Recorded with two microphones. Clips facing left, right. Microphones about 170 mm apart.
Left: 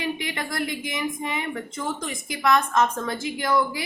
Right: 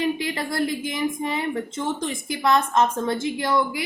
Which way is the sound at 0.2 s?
30° right (ahead or behind).